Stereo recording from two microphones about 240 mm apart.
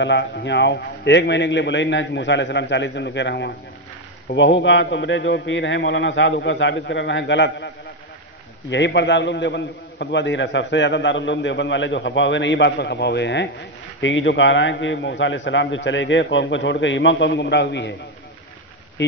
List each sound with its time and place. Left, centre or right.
0.0 s a man's voice: left